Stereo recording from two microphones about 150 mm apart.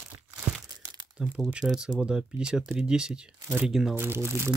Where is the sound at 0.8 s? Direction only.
25° right (ahead or behind).